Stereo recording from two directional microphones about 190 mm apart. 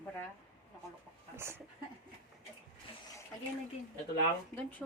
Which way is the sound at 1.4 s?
15° right (ahead or behind).